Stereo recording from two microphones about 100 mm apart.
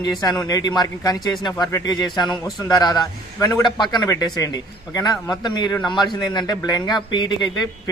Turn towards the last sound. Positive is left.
turn(degrees=45)  # may be behind; listen again after turning